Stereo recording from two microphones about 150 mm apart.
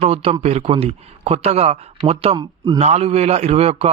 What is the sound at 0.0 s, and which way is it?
A man's voice, 40° right (ahead or behind).